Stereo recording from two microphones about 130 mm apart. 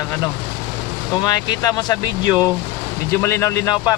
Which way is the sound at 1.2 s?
30° left (ahead or behind).